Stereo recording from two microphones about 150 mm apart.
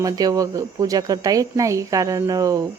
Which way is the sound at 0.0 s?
25° right (ahead or behind).